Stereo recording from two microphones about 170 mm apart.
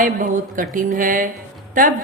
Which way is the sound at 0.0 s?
55° right (ahead or behind).